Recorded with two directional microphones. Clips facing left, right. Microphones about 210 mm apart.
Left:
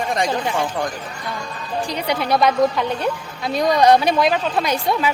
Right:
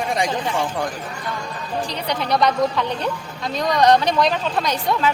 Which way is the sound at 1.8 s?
10° left (ahead or behind).